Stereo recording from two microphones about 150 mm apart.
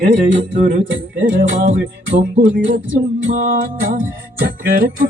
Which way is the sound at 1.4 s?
60° right (ahead or behind).